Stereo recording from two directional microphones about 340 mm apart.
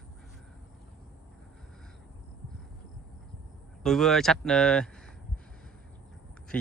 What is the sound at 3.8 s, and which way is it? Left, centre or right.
Speech, centre.